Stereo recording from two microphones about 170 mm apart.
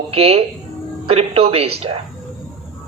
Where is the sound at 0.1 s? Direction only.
35° right (ahead or behind).